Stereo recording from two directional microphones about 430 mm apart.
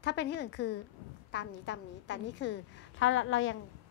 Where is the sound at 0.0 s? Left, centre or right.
Left.